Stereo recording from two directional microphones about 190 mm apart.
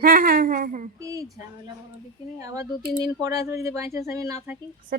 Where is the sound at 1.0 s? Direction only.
15° right (ahead or behind).